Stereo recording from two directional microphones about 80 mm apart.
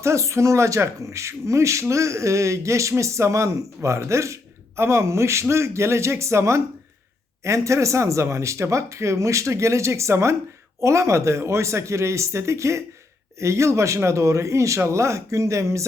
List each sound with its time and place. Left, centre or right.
0.0 s speech: right